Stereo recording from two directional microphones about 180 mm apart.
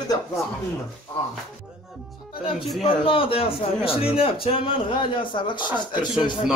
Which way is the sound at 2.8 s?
30° left (ahead or behind).